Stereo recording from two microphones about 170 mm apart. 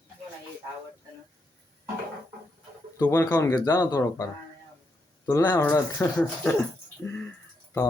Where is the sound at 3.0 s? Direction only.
20° left (ahead or behind).